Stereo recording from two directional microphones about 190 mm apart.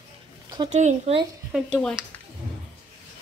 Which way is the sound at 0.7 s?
35° right (ahead or behind).